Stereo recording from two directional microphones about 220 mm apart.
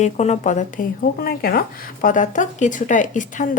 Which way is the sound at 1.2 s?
45° left (ahead or behind).